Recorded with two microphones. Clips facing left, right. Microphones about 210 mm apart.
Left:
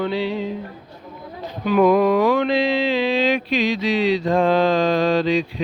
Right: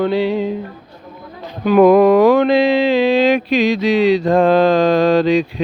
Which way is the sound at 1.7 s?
45° right (ahead or behind).